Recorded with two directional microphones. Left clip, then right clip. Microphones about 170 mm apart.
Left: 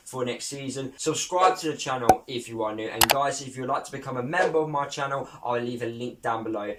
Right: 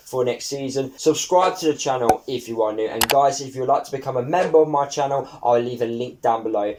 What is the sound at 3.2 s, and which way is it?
Speech, 30° right (ahead or behind).